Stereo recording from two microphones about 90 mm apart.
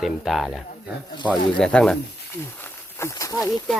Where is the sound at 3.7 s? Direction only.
10° left (ahead or behind).